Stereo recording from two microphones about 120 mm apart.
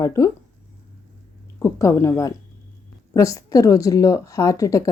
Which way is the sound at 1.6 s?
25° left (ahead or behind).